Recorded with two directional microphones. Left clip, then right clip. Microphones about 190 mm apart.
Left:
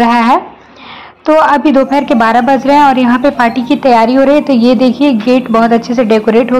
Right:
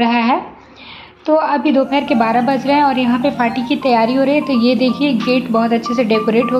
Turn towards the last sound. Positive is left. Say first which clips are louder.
# left 6 dB
turn(degrees=25)  # may be behind; listen again after turning